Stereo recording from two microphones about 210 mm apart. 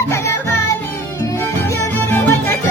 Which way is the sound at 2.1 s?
10° left (ahead or behind).